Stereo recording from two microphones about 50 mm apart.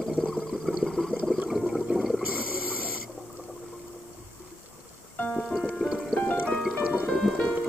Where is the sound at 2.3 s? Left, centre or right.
Right.